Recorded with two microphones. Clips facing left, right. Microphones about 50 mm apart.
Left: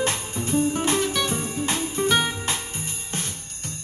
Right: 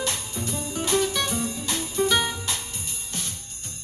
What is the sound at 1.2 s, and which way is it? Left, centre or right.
Music, left.